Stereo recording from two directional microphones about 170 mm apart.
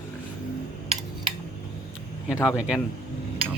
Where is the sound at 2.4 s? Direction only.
Centre (ahead or behind).